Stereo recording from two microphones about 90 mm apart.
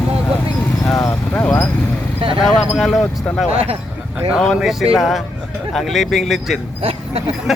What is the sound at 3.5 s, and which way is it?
Speech, 90° right.